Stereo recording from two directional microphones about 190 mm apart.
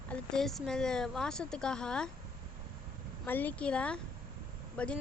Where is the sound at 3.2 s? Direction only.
10° left (ahead or behind).